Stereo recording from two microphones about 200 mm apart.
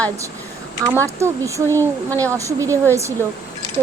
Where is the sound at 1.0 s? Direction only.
15° right (ahead or behind).